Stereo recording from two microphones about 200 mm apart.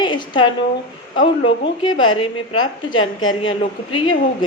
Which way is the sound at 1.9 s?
85° left.